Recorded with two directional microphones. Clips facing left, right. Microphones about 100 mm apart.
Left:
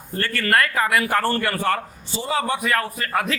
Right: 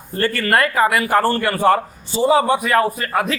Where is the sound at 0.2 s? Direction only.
15° right (ahead or behind).